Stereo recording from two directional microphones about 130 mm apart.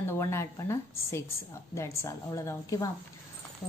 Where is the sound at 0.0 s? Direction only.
20° left (ahead or behind).